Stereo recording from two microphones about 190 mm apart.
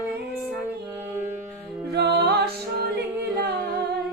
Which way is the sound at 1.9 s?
60° right (ahead or behind).